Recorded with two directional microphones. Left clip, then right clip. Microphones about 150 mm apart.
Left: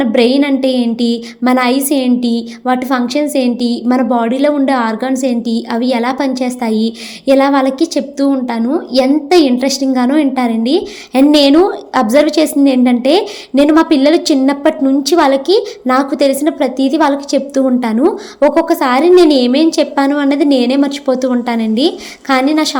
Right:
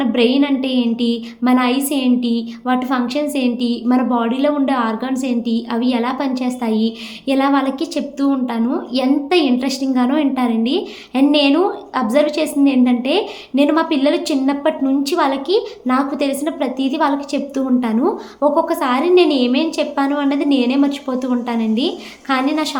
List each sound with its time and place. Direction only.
0.0 s speech: 45° left (ahead or behind)